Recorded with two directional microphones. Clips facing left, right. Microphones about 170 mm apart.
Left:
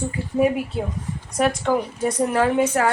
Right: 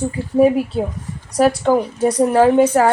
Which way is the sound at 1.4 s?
35° right (ahead or behind).